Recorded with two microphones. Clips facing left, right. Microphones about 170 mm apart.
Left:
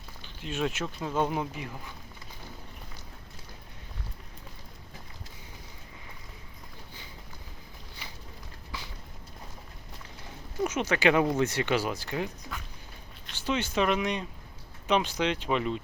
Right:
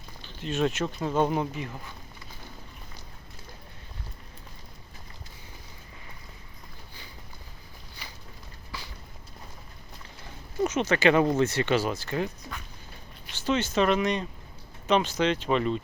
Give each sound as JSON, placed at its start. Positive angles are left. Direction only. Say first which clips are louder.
{"t": 0.3, "sound": "speech", "louder": "right 4 dB", "side_deg": 10}
{"t": 8.7, "sound": "a sound", "louder": "even", "side_deg": 20}
{"t": 10.6, "sound": "speech", "louder": "right 3 dB", "side_deg": 10}